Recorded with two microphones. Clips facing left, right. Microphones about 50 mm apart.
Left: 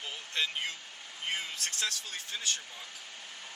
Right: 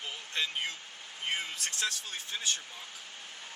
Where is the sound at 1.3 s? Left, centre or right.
Right.